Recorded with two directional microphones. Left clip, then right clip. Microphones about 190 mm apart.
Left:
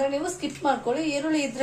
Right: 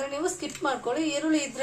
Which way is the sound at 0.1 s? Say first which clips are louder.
Left 2 dB; 55° right (ahead or behind).